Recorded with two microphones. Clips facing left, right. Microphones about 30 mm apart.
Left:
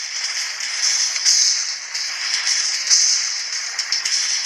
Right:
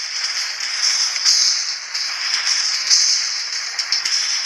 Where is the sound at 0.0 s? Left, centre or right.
Centre.